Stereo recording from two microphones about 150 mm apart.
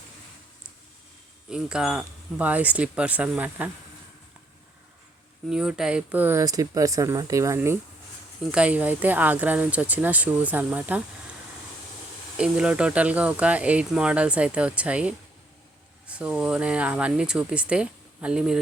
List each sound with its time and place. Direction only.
1.5 s speech: 5° right (ahead or behind)
5.5 s speech: 5° right (ahead or behind)
6.4 s speech: 25° right (ahead or behind)
12.4 s speech: 5° right (ahead or behind)